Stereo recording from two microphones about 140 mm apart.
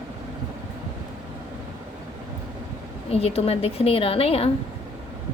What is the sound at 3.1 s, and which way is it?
A woman's voice, 45° left (ahead or behind).